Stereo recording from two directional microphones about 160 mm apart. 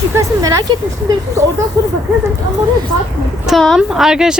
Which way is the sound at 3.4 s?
Centre (ahead or behind).